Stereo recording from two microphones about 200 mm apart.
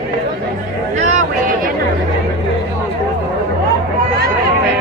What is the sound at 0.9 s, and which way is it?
Vehicle, 35° right (ahead or behind).